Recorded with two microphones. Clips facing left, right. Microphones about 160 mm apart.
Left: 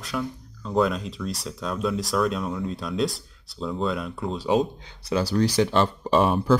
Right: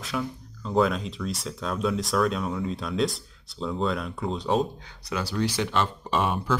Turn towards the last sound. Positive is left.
turn(degrees=35)  # may be behind; listen again after turning